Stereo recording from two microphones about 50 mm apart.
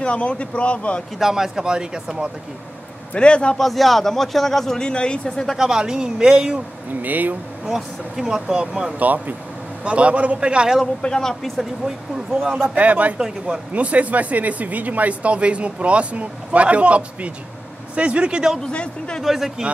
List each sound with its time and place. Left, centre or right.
0.0 s speech: left
1.2 s speech: centre
3.2 s speech: left
3.5 s speech: centre
5.6 s speech: centre
6.9 s a man's voice: right
7.6 s speech: centre
9.8 s speech: right
11.0 s speech: centre
12.6 s a man's voice: right
18.7 s speech: left
19.2 s speech: centre